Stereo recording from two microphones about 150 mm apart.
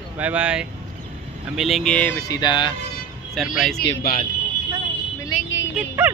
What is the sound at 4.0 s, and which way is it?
Speech, 75° left (ahead or behind).